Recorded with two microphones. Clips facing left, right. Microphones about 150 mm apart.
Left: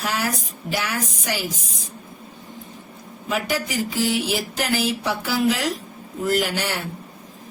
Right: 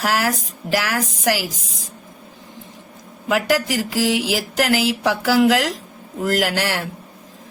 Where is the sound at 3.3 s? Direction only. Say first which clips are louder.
Right 6 dB; 90° right.